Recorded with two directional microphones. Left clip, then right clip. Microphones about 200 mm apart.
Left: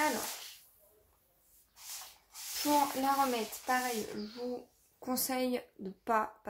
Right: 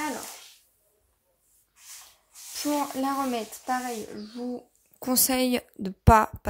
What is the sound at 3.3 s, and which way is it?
A woman's voice, 50° right (ahead or behind).